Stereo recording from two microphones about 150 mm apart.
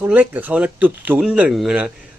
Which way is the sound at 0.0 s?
10° right (ahead or behind).